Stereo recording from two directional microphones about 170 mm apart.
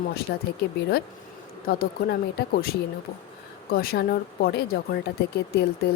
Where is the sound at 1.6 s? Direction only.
65° left (ahead or behind).